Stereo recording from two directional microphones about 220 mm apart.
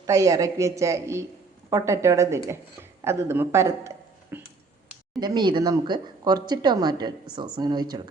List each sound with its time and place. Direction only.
0.0 s a woman's voice: 15° right (ahead or behind)